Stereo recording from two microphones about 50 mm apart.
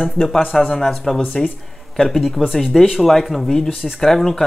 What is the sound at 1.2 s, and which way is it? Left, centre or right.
Speech, left.